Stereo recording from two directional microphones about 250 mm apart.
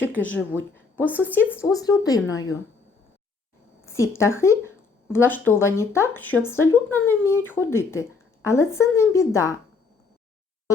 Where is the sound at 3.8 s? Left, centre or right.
Centre.